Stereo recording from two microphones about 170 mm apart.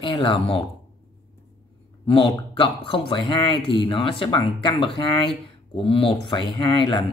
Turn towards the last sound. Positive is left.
turn(degrees=30)  # may be behind; listen again after turning